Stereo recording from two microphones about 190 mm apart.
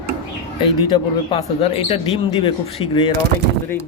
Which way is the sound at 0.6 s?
25° left (ahead or behind).